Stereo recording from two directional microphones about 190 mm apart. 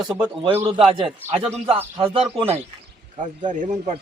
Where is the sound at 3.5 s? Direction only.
40° right (ahead or behind).